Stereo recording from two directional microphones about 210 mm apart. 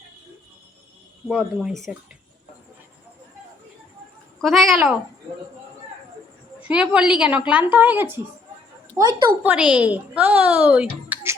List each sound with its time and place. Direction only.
1.3 s a woman's voice: 5° right (ahead or behind)
4.4 s a woman's voice: centre (ahead or behind)
6.7 s a woman's voice: 5° right (ahead or behind)
9.4 s speech: 5° right (ahead or behind)